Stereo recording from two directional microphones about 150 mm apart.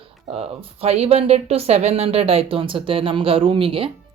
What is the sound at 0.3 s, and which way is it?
Speech, 40° right (ahead or behind).